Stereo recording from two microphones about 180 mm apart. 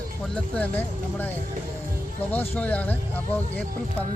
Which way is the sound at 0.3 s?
5° left (ahead or behind).